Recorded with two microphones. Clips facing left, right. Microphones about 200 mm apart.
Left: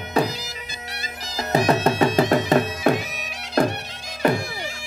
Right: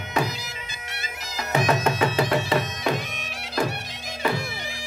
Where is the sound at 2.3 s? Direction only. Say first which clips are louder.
Left 5 dB; 50° left (ahead or behind).